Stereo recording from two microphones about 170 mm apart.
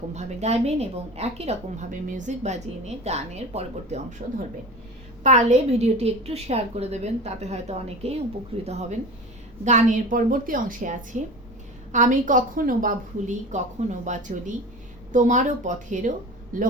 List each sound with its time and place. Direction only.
0.1 s a woman's voice: 40° right (ahead or behind)
5.2 s a woman's voice: 45° right (ahead or behind)